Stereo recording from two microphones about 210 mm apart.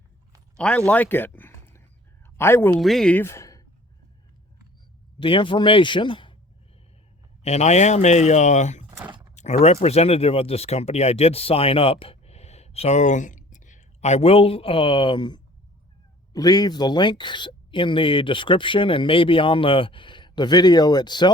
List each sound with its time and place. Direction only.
0.5 s speech: 5° left (ahead or behind)
2.7 s speech: centre (ahead or behind)
5.2 s speech: 25° left (ahead or behind)
7.4 s speech: 30° left (ahead or behind)
9.3 s a sound: 35° left (ahead or behind)
9.8 s speech: 30° left (ahead or behind)